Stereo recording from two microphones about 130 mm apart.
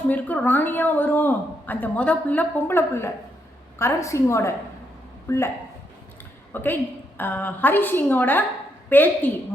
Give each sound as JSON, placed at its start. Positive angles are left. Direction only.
{"t": 0.1, "sound": "a woman's voice", "side_deg": 10}
{"t": 6.5, "sound": "a woman's voice", "side_deg": 15}